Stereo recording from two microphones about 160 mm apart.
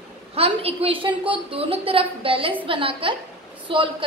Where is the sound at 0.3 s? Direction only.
40° right (ahead or behind).